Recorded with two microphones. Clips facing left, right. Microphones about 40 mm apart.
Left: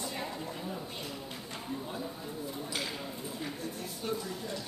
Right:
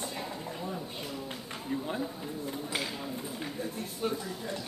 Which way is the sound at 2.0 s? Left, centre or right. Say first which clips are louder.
Right 3 dB; centre.